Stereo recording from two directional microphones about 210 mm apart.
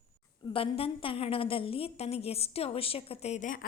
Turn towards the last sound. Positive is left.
turn(degrees=40)  # may be behind; listen again after turning